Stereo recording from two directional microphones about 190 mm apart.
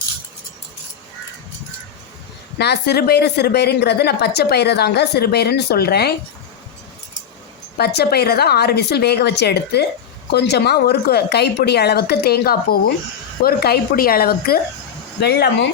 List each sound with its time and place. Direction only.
2.6 s a woman's voice: 60° left (ahead or behind)
7.8 s a woman's voice: 55° left (ahead or behind)